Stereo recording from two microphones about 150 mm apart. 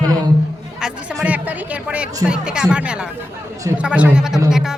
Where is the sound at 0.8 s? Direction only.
5° right (ahead or behind).